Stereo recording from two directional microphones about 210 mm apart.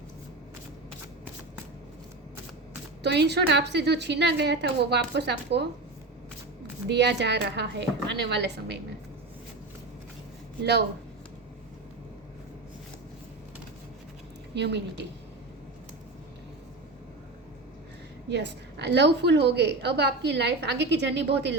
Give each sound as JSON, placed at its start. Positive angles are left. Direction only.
{"t": 3.0, "sound": "a woman's voice", "side_deg": -55}
{"t": 6.8, "sound": "a woman's voice", "side_deg": -55}
{"t": 10.6, "sound": "a woman's voice", "side_deg": -55}
{"t": 14.5, "sound": "a woman's voice", "side_deg": -55}
{"t": 18.3, "sound": "a woman's voice", "side_deg": -55}